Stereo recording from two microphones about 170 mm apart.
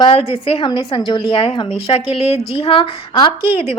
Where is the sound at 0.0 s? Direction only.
35° left (ahead or behind).